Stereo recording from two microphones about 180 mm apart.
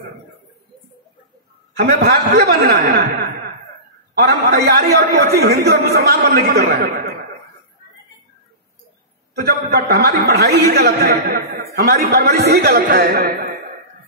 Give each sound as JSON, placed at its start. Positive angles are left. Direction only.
{"t": 1.8, "sound": "a man's voice", "side_deg": -65}
{"t": 4.2, "sound": "a man's voice", "side_deg": -50}
{"t": 4.9, "sound": "a man's voice", "side_deg": -65}
{"t": 9.3, "sound": "a man's voice", "side_deg": -60}